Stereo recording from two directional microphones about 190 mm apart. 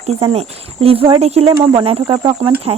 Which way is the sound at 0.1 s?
30° right (ahead or behind).